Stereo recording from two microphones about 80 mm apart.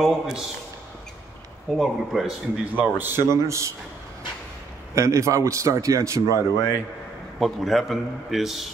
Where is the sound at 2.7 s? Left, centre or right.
Right.